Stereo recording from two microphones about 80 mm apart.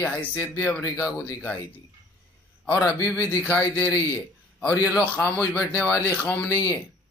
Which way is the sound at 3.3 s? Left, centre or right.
Left.